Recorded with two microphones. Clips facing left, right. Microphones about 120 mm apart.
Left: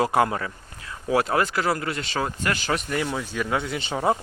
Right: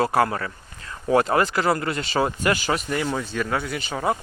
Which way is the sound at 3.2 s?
10° left (ahead or behind).